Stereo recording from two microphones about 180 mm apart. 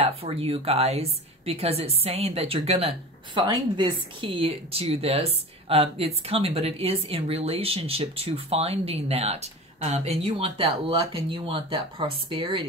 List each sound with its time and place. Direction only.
0.0 s a woman's voice: 35° right (ahead or behind)